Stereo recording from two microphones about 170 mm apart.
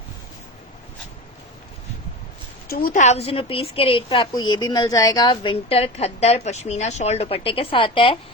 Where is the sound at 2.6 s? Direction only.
60° left (ahead or behind).